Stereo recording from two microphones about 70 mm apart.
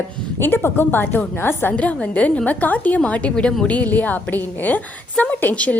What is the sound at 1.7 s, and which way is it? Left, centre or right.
A woman's voice, centre.